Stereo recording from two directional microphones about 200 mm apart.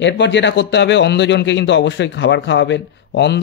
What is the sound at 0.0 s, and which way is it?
Speech, 65° left (ahead or behind).